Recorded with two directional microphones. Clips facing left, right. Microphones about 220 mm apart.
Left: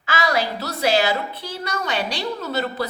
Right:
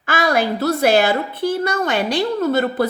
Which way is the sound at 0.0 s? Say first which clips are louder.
Right 4 dB; 50° right (ahead or behind).